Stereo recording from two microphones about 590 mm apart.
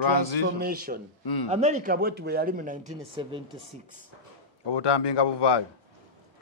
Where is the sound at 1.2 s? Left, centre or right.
Left.